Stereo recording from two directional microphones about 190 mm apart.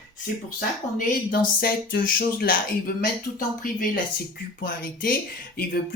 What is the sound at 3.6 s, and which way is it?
Speech, 45° left (ahead or behind).